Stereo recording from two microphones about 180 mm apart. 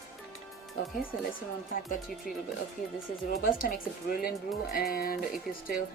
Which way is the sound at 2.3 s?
55° left (ahead or behind).